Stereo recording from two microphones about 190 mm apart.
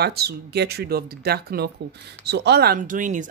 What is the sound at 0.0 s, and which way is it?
A woman's voice, 55° right (ahead or behind).